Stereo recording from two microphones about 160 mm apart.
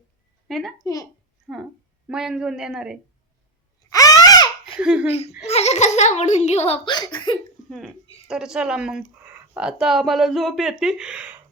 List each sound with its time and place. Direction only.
0.4 s a woman's voice: centre (ahead or behind)
3.8 s a sound: 20° left (ahead or behind)
4.8 s speech: 5° right (ahead or behind)
5.4 s a child's voice: 40° left (ahead or behind)
7.7 s speech: centre (ahead or behind)